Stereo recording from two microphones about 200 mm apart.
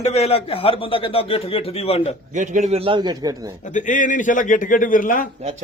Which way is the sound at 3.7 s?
40° left (ahead or behind).